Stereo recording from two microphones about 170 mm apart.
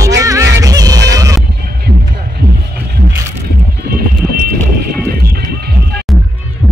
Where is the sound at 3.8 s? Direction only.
60° right (ahead or behind).